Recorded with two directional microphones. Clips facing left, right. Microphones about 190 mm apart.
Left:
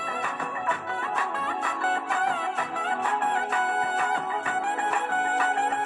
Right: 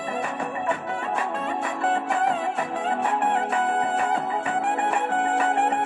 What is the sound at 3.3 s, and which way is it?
Music, 30° right (ahead or behind).